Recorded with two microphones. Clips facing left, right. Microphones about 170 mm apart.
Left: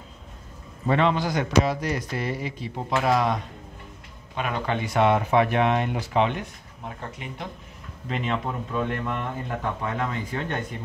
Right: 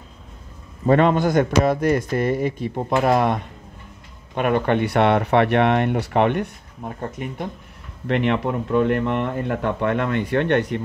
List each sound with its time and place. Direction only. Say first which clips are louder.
0.8 s speech: right 6 dB; 50° right (ahead or behind)
4.4 s speech: right 8 dB; 55° right (ahead or behind)
8.1 s speech: right 8 dB; 70° right (ahead or behind)